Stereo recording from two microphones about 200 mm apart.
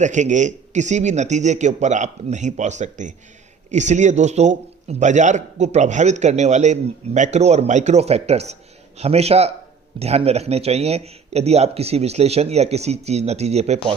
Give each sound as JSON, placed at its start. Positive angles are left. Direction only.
{"t": 0.0, "sound": "a man's voice", "side_deg": -35}